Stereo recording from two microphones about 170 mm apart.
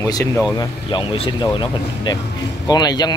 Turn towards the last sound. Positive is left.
turn(degrees=25)  # may be behind; listen again after turning